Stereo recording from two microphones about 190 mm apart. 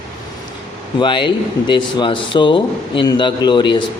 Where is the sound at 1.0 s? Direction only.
25° left (ahead or behind).